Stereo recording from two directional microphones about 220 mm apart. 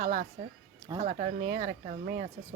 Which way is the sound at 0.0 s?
35° right (ahead or behind).